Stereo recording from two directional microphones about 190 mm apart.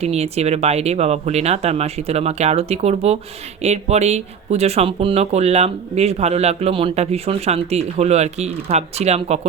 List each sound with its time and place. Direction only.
0.0 s speech: 35° right (ahead or behind)